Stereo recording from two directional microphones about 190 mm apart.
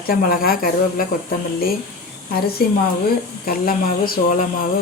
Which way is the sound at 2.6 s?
55° left (ahead or behind).